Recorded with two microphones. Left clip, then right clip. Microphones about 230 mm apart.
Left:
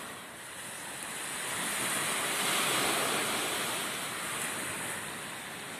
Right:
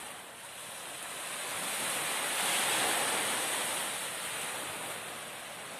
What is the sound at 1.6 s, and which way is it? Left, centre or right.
Waterfall, right.